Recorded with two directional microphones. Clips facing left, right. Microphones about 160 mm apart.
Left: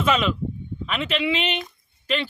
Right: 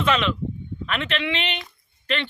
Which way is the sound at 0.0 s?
10° left (ahead or behind).